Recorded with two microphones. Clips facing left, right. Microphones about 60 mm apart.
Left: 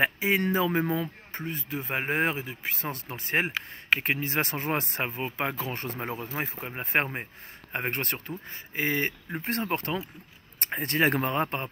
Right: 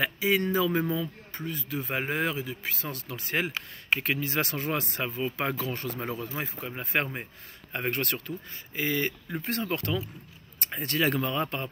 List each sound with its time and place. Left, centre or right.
0.0 s a man's voice: left
1.7 s speech: left
2.0 s speech: left
2.4 s speech: left
5.4 s speech: centre
5.7 s speech: left